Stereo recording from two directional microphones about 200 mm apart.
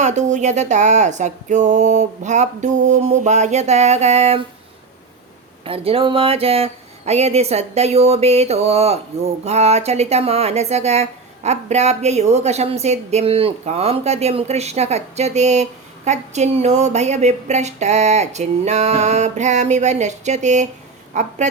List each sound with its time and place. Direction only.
0.0 s speech: 35° right (ahead or behind)
5.6 s speech: 30° right (ahead or behind)